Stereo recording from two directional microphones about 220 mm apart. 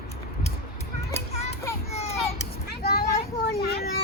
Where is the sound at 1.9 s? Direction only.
30° left (ahead or behind).